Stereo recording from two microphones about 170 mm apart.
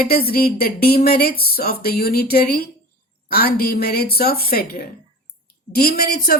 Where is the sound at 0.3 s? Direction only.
60° left (ahead or behind).